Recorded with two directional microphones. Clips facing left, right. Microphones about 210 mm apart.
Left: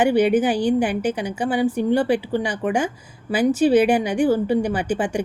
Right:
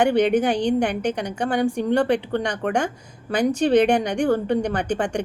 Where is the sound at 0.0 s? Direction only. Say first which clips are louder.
Left 1 dB; 5° left (ahead or behind).